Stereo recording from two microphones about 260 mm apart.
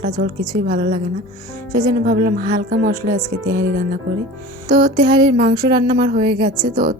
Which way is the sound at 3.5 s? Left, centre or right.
Right.